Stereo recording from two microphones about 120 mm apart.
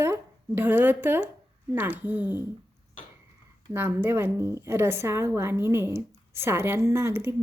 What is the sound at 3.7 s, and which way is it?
A woman's voice, 15° right (ahead or behind).